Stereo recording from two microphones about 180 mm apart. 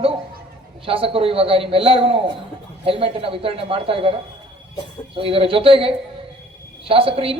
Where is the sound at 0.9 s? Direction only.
30° right (ahead or behind).